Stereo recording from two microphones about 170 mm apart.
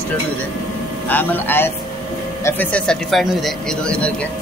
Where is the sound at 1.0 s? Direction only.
10° left (ahead or behind).